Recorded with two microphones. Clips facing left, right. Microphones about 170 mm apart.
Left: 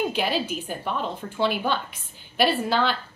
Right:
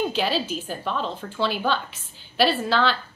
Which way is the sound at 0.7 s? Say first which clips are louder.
Right 1 dB; 10° left (ahead or behind).